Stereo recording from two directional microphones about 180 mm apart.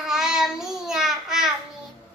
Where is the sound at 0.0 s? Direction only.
5° right (ahead or behind).